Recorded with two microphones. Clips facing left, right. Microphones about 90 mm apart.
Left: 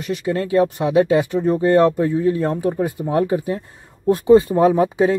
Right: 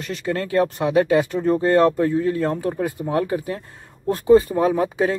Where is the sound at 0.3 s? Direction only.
20° left (ahead or behind).